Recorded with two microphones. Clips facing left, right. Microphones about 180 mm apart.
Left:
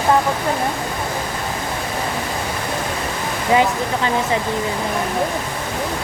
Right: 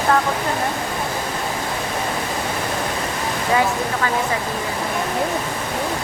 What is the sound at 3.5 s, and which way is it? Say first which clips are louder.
Speech: left 3 dB; 20° left (ahead or behind).